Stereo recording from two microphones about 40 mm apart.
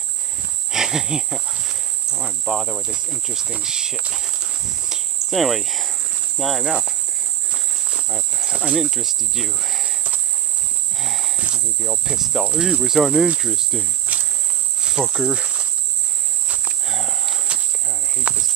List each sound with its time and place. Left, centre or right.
0.7 s speech: centre
1.6 s a sound: centre
2.2 s speech: centre
4.1 s cricket: centre
6.6 s speech: centre
7.5 s a sound: centre
8.5 s speech: centre
11.0 s a sound: centre
11.3 s cricket: right
11.8 s speech: centre
14.1 s cricket: right
14.8 s insect: centre
16.8 s a sound: centre
18.3 s cricket: right